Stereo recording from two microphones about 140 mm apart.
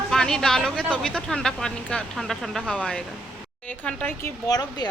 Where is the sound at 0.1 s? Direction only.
5° left (ahead or behind).